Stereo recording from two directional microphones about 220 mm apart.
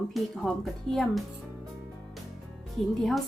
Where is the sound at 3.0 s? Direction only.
Centre (ahead or behind).